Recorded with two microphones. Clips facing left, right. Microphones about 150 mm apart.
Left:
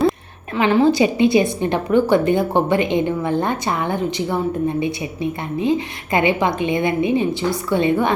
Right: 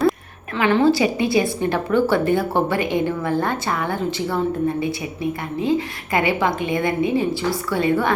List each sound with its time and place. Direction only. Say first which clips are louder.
0.5 s a woman's voice: left 1 dB; 15° left (ahead or behind)